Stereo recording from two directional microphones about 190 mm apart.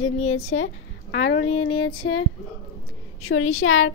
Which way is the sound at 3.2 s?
90° left.